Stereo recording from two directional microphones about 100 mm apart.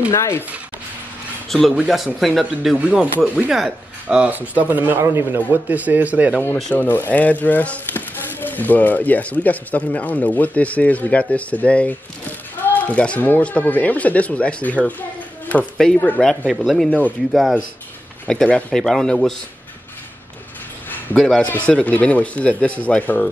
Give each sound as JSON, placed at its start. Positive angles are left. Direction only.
{"t": 0.1, "sound": "speech", "side_deg": 30}
{"t": 1.8, "sound": "speech", "side_deg": -5}
{"t": 6.4, "sound": "speech", "side_deg": 15}
{"t": 16.4, "sound": "speech", "side_deg": -5}
{"t": 21.2, "sound": "speech", "side_deg": 5}